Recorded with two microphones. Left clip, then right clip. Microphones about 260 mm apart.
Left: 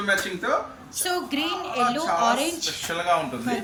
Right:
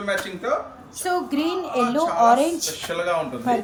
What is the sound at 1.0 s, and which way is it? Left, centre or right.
Speech, right.